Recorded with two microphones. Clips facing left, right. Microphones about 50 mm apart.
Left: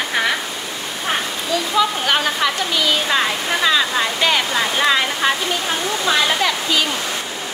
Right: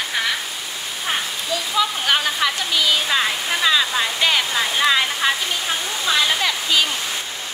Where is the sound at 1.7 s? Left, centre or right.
Centre.